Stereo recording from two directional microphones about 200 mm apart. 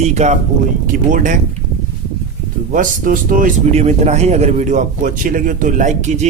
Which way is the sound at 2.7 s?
45° right (ahead or behind).